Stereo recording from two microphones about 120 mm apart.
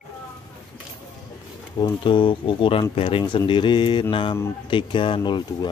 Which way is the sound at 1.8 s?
45° left (ahead or behind).